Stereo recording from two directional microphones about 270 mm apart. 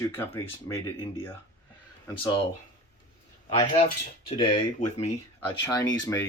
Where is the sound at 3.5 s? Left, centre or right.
Left.